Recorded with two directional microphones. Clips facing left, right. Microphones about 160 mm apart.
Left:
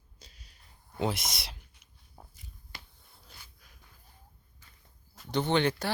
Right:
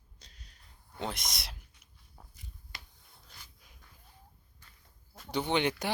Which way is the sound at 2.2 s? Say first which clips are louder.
Left 4 dB; 20° left (ahead or behind).